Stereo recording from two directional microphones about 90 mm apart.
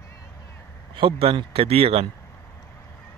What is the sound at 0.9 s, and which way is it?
Speech, 80° right.